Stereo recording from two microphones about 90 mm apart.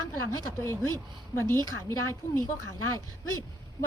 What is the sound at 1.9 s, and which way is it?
Speech, 30° left (ahead or behind).